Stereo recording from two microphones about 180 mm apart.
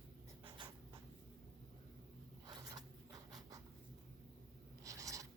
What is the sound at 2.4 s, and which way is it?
Zipper, 25° right (ahead or behind).